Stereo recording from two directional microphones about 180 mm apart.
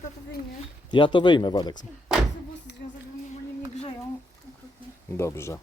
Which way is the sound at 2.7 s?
70° left (ahead or behind).